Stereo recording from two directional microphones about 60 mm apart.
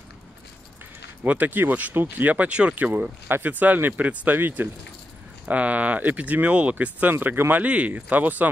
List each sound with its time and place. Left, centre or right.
1.2 s speech: right
4.4 s speech: right
5.5 s speech: right
7.6 s speech: right